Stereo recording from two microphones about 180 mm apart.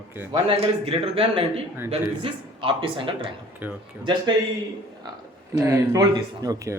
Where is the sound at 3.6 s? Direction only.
10° right (ahead or behind).